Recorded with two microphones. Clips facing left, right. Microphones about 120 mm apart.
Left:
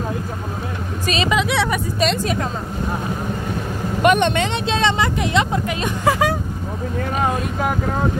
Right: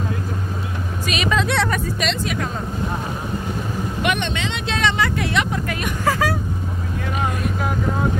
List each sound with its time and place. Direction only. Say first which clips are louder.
1.0 s vehicle: left 3 dB; 30° left (ahead or behind)
1.3 s speech: even; 5° left (ahead or behind)
2.0 s a woman's voice: left 4 dB; 35° left (ahead or behind)
4.0 s speech: left 8 dB; 45° left (ahead or behind)
4.6 s speech: right 1 dB; 25° left (ahead or behind)